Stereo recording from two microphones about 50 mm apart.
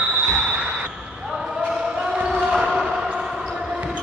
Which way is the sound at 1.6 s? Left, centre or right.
Right.